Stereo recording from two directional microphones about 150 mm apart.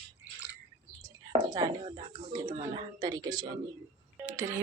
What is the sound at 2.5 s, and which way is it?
A woman's voice, 30° right (ahead or behind).